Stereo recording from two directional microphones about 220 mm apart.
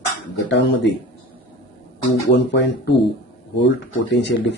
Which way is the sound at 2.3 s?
55° left (ahead or behind).